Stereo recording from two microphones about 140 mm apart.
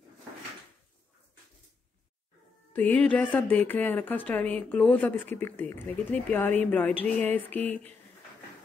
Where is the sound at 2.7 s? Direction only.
10° left (ahead or behind).